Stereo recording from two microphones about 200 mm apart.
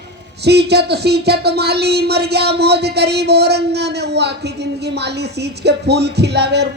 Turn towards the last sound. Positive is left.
turn(degrees=-55)  # may be behind; listen again after turning